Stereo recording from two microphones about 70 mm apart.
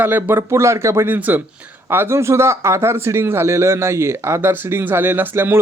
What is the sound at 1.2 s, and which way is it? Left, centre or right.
Speech, right.